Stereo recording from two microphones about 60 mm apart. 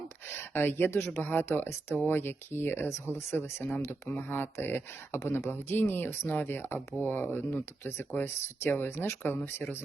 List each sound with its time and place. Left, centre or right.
0.3 s speech: left
4.2 s speech: left